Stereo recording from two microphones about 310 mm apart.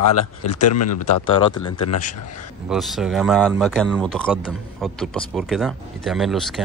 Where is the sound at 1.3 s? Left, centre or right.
Centre.